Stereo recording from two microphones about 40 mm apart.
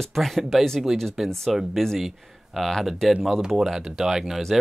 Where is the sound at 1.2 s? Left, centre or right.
Centre.